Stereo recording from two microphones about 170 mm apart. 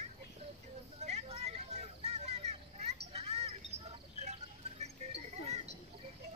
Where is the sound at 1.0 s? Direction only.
40° right (ahead or behind).